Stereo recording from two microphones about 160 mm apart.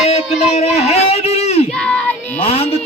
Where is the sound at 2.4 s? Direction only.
40° left (ahead or behind).